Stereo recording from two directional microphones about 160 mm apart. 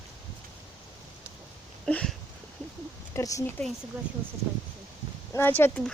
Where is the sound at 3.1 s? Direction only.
20° left (ahead or behind).